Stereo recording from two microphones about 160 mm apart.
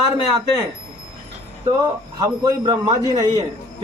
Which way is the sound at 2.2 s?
25° right (ahead or behind).